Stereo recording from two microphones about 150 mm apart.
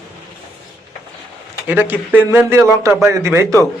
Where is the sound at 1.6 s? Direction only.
15° right (ahead or behind).